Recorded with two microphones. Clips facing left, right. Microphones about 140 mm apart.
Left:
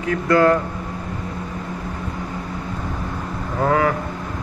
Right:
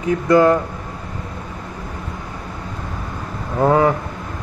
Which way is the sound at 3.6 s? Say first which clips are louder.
Right 4 dB; 25° right (ahead or behind).